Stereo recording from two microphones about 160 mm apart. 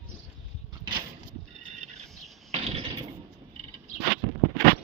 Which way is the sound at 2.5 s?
40° right (ahead or behind).